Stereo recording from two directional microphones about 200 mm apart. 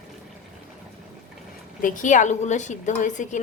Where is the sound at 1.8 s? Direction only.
40° left (ahead or behind).